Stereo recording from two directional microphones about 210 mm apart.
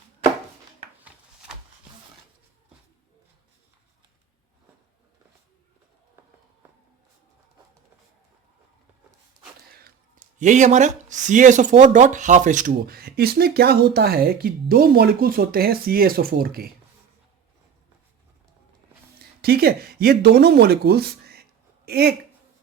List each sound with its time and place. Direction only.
10.3 s speech: 35° right (ahead or behind)
19.4 s speech: 50° right (ahead or behind)